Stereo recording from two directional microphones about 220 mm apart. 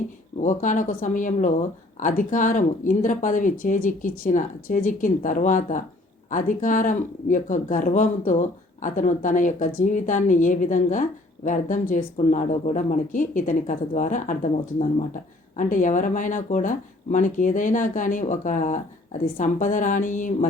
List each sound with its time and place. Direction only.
0.4 s speech: 35° left (ahead or behind)
15.5 s speech: 35° left (ahead or behind)